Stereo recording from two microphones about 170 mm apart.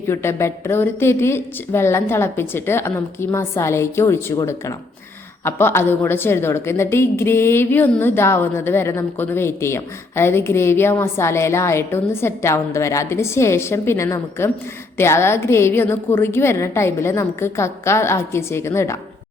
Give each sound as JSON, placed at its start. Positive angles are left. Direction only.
{"t": 0.1, "sound": "a woman's voice", "side_deg": 15}